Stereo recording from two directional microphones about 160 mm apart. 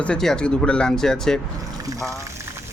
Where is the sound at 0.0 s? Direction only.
5° left (ahead or behind).